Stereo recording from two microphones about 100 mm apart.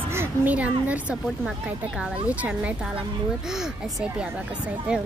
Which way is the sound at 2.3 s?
15° right (ahead or behind).